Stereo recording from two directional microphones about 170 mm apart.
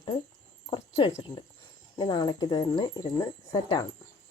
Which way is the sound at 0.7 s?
30° left (ahead or behind).